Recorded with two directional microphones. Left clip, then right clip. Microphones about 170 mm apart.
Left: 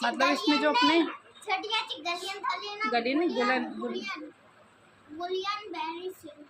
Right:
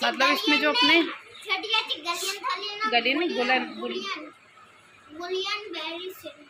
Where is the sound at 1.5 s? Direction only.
75° left (ahead or behind).